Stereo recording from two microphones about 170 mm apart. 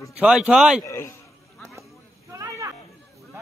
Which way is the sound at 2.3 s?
20° right (ahead or behind).